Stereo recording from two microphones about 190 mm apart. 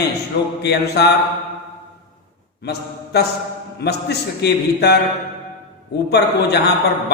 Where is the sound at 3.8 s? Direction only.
60° left (ahead or behind).